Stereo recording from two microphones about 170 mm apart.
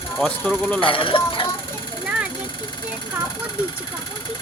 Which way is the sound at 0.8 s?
30° left (ahead or behind).